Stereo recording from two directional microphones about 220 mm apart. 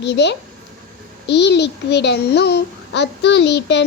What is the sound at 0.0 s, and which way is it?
A child's voice, 50° left (ahead or behind).